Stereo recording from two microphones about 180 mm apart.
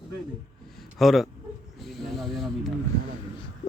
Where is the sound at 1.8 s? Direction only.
Centre (ahead or behind).